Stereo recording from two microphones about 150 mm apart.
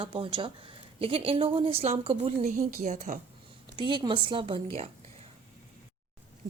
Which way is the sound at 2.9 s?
55° right (ahead or behind).